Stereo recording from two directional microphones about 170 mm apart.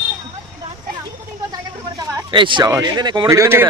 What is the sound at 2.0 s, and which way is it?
Speech, 20° right (ahead or behind).